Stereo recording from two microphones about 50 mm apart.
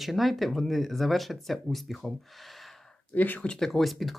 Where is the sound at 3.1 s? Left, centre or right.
Left.